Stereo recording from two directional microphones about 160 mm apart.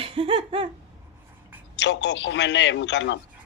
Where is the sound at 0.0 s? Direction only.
35° right (ahead or behind).